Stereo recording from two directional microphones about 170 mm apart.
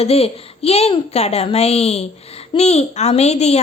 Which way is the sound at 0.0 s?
35° left (ahead or behind).